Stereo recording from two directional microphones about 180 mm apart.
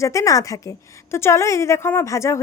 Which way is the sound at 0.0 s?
15° left (ahead or behind).